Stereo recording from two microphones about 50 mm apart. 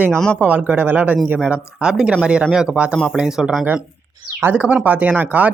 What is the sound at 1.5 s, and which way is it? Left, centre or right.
Speech, centre.